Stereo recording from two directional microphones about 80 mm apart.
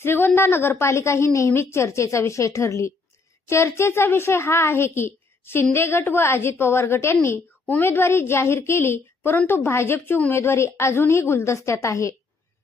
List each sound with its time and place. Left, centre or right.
0.0 s a woman's voice: left